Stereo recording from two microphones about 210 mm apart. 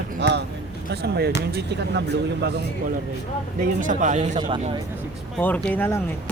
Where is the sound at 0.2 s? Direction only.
55° right (ahead or behind).